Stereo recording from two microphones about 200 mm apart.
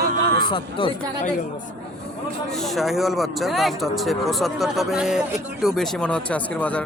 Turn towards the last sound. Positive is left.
turn(degrees=5)  # may be behind; listen again after turning